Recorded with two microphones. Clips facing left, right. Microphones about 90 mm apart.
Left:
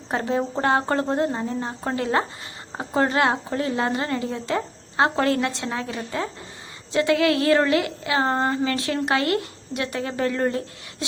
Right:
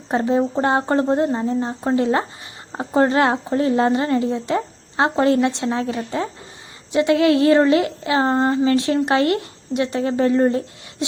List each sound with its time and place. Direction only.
0.1 s speech: 25° right (ahead or behind)